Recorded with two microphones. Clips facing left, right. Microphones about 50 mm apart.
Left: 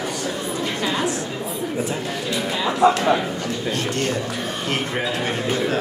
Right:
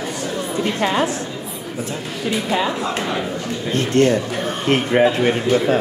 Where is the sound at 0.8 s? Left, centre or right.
Right.